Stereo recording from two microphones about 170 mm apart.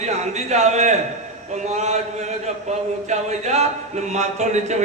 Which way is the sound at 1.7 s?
40° right (ahead or behind).